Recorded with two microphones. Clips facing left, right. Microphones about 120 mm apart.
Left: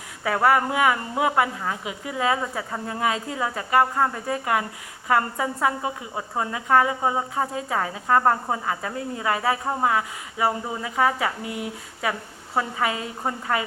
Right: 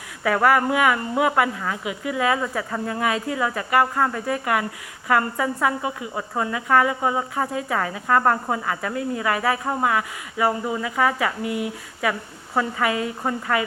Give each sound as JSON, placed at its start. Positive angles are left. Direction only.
{"t": 0.3, "sound": "a woman's voice", "side_deg": 30}